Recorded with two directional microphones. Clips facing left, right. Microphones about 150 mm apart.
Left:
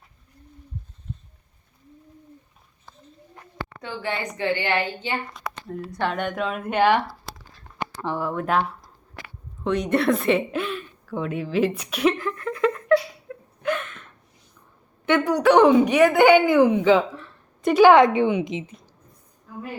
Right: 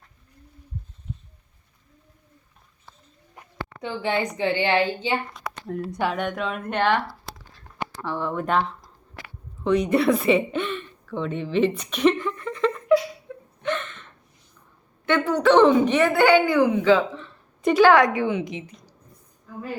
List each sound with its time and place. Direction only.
3.3 s a woman's voice: 15° right (ahead or behind)
6.0 s a woman's voice: centre (ahead or behind)
8.2 s a woman's voice: 5° left (ahead or behind)
13.2 s a sound: 5° left (ahead or behind)
15.0 s speech: 15° left (ahead or behind)
17.2 s a sound: centre (ahead or behind)
17.7 s a woman's voice: 20° left (ahead or behind)